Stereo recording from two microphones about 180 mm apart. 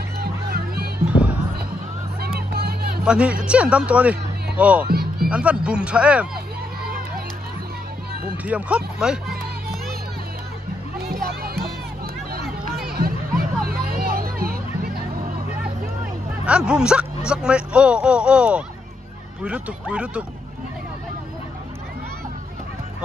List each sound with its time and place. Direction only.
0.2 s music: 60° right (ahead or behind)
1.0 s music: 5° right (ahead or behind)
2.2 s vehicle: 60° right (ahead or behind)
3.1 s speech: 5° right (ahead or behind)
4.8 s music: 55° right (ahead or behind)
5.3 s speech: 5° right (ahead or behind)
8.5 s speech: 5° right (ahead or behind)
11.0 s music: 55° right (ahead or behind)
12.8 s music: 55° right (ahead or behind)
16.4 s speech: 5° right (ahead or behind)